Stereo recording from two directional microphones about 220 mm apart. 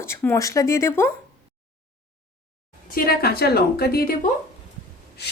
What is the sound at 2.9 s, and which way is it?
A woman's voice, 40° left (ahead or behind).